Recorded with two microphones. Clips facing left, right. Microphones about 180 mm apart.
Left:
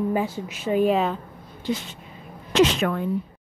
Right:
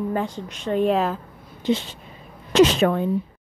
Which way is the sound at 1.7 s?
30° right (ahead or behind).